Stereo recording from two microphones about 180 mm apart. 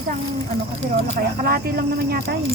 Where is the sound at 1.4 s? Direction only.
55° right (ahead or behind).